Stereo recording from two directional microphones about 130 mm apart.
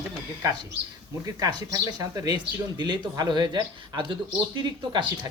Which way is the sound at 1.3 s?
30° right (ahead or behind).